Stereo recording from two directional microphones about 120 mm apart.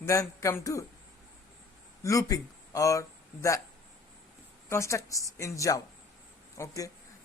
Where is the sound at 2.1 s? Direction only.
25° left (ahead or behind).